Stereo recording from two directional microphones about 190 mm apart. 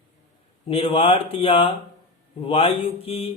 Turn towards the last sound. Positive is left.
turn(degrees=30)  # may be behind; listen again after turning